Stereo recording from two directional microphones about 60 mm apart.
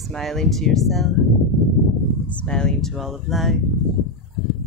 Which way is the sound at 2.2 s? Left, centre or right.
Left.